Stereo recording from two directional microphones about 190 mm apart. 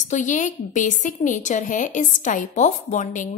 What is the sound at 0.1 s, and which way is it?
A woman's voice, 40° left (ahead or behind).